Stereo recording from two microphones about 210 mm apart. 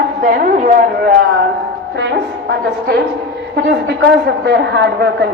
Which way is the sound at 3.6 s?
55° right (ahead or behind).